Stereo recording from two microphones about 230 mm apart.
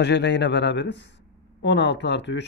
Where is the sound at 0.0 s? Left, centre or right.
Left.